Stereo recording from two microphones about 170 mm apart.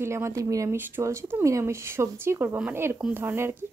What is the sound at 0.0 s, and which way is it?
Speech, 15° right (ahead or behind).